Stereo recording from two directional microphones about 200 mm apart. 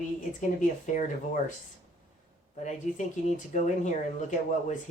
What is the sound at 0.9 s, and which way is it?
Speech, 40° left (ahead or behind).